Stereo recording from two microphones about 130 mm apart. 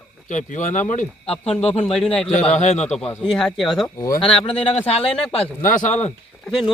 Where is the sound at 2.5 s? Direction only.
60° left (ahead or behind).